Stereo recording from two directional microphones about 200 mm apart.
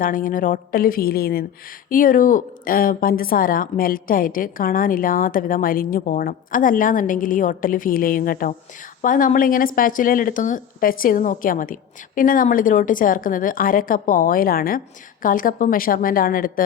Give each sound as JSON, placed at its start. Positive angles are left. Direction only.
{"t": 0.0, "sound": "a woman's voice", "side_deg": 45}